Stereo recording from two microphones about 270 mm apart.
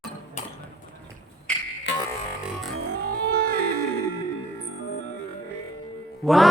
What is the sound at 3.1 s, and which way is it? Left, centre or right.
Music, right.